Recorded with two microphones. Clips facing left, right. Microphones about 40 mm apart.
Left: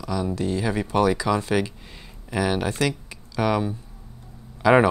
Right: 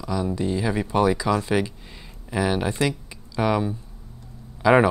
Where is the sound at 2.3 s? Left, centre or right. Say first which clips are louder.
Even; centre.